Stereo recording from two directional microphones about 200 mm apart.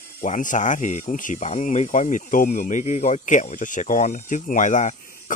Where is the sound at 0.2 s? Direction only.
40° left (ahead or behind).